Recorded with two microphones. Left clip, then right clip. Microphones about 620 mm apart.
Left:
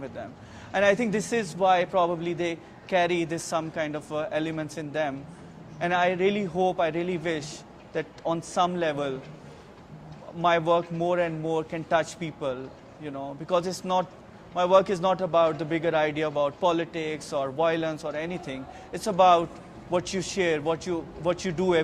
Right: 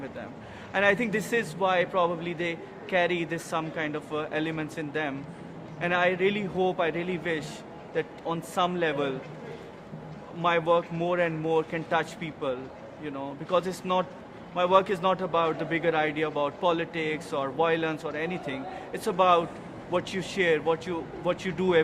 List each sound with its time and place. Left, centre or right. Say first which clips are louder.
0.7 s a man's voice: left 2 dB; left
10.4 s a man's voice: left 1 dB; left